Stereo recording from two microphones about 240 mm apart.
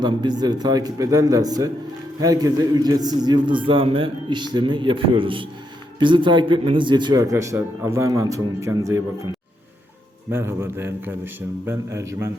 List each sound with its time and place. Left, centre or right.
0.0 s a man's voice: centre
10.3 s a man's voice: centre